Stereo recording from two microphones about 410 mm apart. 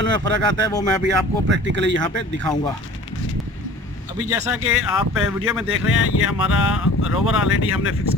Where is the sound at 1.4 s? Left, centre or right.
Right.